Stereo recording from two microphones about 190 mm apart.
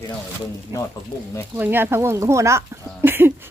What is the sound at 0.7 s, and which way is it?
Speech, 15° right (ahead or behind).